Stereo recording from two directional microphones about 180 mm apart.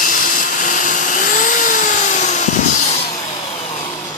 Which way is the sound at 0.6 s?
45° left (ahead or behind).